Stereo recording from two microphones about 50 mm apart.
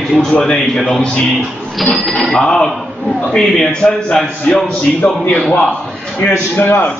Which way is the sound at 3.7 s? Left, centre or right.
Left.